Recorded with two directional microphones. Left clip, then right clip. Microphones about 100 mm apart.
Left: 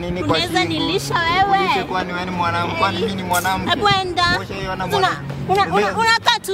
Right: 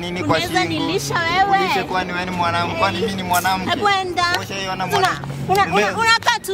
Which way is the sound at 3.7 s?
15° left (ahead or behind).